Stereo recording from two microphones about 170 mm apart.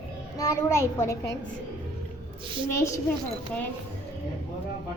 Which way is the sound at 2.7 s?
15° left (ahead or behind).